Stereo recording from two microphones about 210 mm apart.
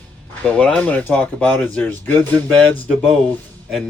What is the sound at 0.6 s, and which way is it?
Speech, 5° left (ahead or behind).